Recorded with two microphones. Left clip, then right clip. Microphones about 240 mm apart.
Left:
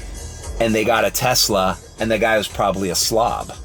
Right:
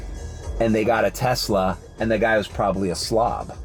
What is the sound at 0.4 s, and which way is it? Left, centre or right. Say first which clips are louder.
Speech: left 2 dB; centre.